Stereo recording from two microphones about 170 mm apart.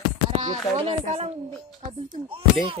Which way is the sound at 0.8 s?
35° right (ahead or behind).